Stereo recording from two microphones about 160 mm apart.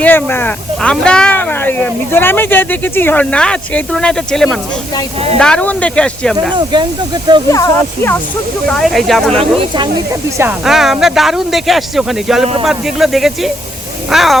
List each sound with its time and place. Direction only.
0.0 s speech: 10° left (ahead or behind)
6.6 s speech: 30° right (ahead or behind)
7.5 s speech: 20° left (ahead or behind)
8.7 s speech: centre (ahead or behind)
9.3 s speech: 35° right (ahead or behind)
10.6 s speech: centre (ahead or behind)